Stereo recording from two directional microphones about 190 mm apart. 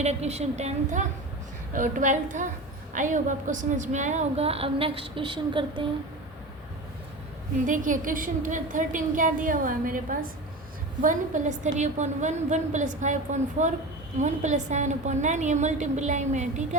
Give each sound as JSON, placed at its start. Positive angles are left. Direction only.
{"t": 0.0, "sound": "a woman's voice", "side_deg": -35}
{"t": 7.7, "sound": "a woman's voice", "side_deg": -45}